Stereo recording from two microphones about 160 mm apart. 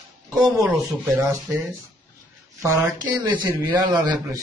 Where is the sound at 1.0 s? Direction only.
15° right (ahead or behind).